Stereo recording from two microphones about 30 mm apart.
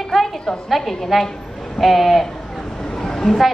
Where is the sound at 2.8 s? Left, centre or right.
Centre.